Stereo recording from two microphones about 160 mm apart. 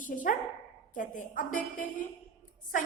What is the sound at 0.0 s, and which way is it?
A woman's voice, 55° left (ahead or behind).